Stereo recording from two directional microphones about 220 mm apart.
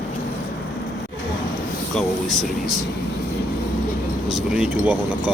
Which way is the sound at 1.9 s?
Centre (ahead or behind).